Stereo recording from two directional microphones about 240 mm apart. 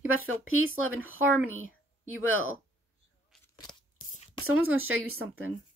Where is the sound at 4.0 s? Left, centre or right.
Left.